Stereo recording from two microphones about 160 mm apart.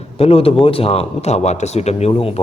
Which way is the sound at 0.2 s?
35° left (ahead or behind).